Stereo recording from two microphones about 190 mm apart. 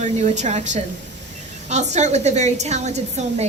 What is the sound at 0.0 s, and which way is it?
A woman's voice, 40° right (ahead or behind).